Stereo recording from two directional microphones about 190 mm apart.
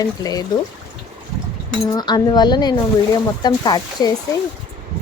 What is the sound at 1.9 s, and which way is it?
Speech, 20° left (ahead or behind).